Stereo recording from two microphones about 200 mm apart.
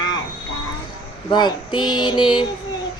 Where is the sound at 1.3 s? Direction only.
20° left (ahead or behind).